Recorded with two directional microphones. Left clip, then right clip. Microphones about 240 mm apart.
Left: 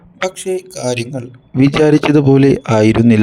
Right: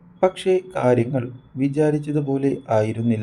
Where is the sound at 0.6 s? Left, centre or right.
Left.